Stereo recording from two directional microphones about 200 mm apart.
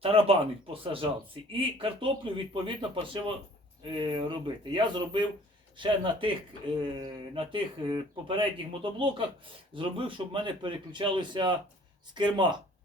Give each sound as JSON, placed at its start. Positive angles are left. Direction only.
{"t": 0.0, "sound": "speech", "side_deg": -30}